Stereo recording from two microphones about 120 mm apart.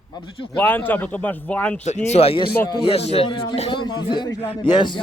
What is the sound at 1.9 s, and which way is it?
Speech, 65° left (ahead or behind).